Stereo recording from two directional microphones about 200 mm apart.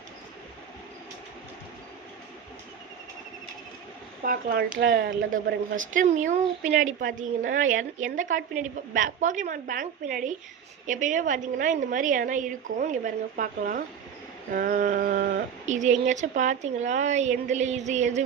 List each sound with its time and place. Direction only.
4.2 s speech: 45° right (ahead or behind)